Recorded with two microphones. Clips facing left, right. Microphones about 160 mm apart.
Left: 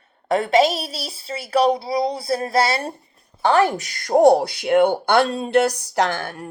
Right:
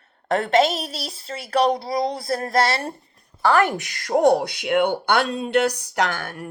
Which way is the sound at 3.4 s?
25° left (ahead or behind).